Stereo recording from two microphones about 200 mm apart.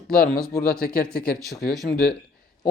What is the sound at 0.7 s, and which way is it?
Speech, 50° left (ahead or behind).